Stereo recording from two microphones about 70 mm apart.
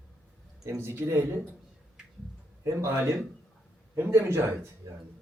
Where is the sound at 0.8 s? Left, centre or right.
Right.